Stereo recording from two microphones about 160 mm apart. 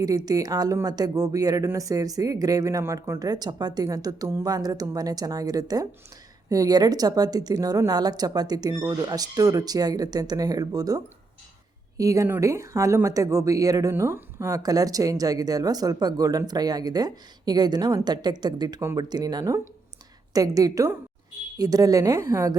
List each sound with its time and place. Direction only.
0.3 s speech: 25° right (ahead or behind)